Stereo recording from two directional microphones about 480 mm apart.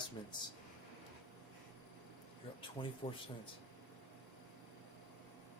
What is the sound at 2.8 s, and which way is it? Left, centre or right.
Speech, centre.